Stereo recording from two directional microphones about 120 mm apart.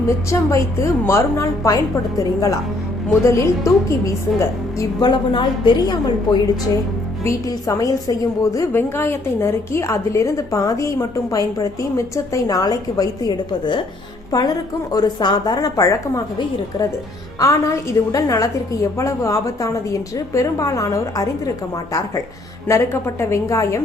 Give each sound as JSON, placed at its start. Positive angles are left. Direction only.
{"t": 0.3, "sound": "a woman's voice", "side_deg": 25}
{"t": 5.0, "sound": "a woman's voice", "side_deg": 40}
{"t": 17.4, "sound": "a woman's voice", "side_deg": 25}
{"t": 22.7, "sound": "a woman's voice", "side_deg": 25}